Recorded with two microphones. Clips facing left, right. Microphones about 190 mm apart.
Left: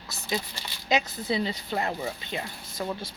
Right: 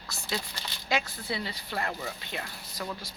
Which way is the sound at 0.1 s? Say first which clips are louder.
Left 4 dB; 20° left (ahead or behind).